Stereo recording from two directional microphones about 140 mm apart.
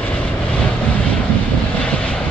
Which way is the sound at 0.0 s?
10° left (ahead or behind).